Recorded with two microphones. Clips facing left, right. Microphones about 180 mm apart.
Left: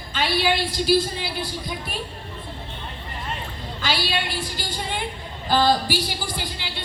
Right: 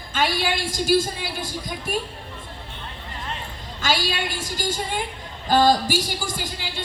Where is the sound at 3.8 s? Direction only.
45° right (ahead or behind).